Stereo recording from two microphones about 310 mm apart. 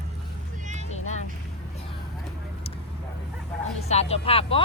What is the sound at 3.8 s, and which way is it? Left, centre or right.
Speech, centre.